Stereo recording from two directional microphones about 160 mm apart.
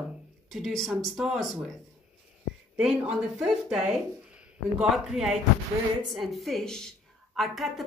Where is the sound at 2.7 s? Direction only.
5° right (ahead or behind).